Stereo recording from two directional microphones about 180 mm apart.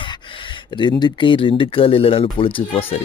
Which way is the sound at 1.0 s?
25° left (ahead or behind).